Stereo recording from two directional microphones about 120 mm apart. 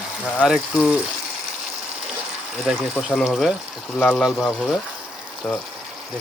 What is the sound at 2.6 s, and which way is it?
Speech, centre (ahead or behind).